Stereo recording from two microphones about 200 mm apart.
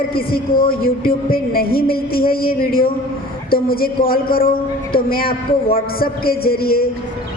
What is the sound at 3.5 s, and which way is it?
A woman's voice, 50° left (ahead or behind).